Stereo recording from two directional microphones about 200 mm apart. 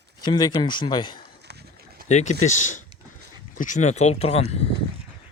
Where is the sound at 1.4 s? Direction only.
55° right (ahead or behind).